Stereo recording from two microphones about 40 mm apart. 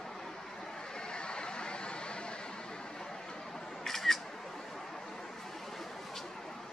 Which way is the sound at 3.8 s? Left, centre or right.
Centre.